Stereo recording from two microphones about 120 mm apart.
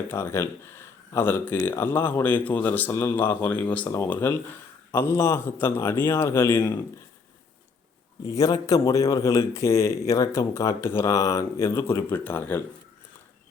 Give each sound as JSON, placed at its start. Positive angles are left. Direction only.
{"t": 0.1, "sound": "a man's voice", "side_deg": 20}
{"t": 8.2, "sound": "a man's voice", "side_deg": 30}